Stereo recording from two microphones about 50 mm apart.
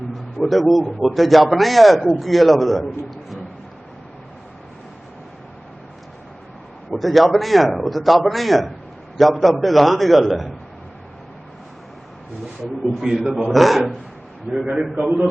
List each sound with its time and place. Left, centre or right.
0.4 s a man's voice: centre
6.9 s a man's voice: centre
13.0 s a man's voice: centre
14.5 s a man's voice: centre